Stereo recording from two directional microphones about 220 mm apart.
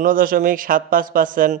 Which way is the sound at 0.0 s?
40° right (ahead or behind).